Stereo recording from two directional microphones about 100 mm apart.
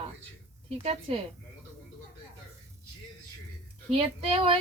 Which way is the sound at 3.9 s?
65° right (ahead or behind).